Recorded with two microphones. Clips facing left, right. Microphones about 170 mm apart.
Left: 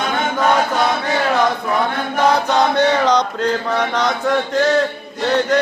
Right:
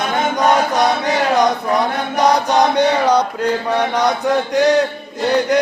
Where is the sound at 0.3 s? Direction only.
15° right (ahead or behind).